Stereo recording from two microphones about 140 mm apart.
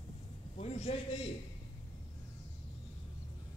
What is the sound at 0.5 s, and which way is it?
Speech, 50° left (ahead or behind).